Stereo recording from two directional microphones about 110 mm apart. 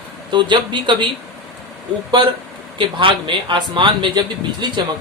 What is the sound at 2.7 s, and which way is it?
Speech, 45° right (ahead or behind).